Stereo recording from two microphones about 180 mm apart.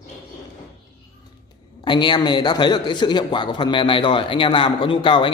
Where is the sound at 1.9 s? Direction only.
25° left (ahead or behind).